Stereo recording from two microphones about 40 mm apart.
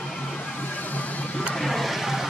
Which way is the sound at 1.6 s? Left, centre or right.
Centre.